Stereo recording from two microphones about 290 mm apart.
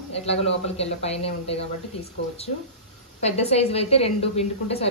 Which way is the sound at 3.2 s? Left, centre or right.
Left.